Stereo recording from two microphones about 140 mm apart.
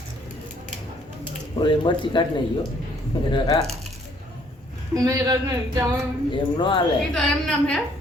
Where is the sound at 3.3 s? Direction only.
30° left (ahead or behind).